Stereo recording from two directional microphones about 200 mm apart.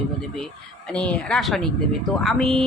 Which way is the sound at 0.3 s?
5° left (ahead or behind).